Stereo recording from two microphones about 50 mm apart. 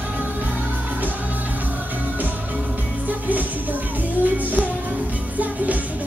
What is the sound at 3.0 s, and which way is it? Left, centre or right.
Music, right.